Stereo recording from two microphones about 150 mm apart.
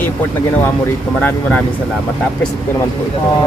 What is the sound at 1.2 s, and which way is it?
Speech, 10° left (ahead or behind).